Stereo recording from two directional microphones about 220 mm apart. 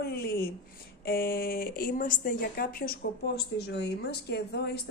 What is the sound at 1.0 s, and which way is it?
Speech, 45° left (ahead or behind).